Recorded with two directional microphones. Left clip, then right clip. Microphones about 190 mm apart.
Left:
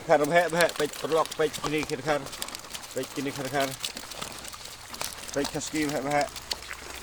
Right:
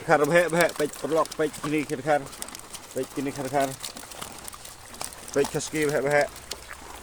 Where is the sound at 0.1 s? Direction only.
60° right (ahead or behind).